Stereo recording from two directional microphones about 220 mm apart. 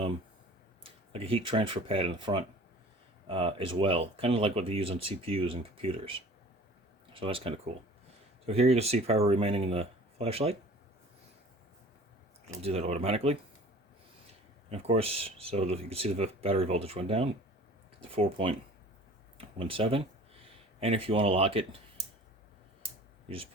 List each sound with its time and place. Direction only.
1.1 s speech: 25° right (ahead or behind)
12.6 s speech: 30° right (ahead or behind)
14.7 s speech: 25° right (ahead or behind)